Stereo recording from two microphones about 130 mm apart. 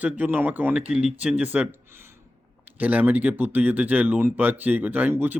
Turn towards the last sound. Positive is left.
turn(degrees=-15)  # may be behind; listen again after turning